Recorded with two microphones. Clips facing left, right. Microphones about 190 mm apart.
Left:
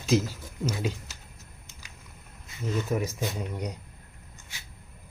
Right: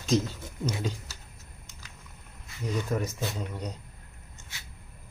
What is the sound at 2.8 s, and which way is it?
Speech, 10° left (ahead or behind).